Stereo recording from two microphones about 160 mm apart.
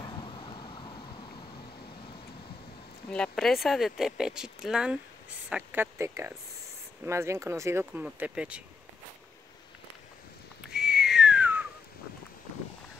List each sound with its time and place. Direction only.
0.0 s vehicle: 35° left (ahead or behind)
3.1 s speech: 5° left (ahead or behind)
10.7 s whistling: 5° right (ahead or behind)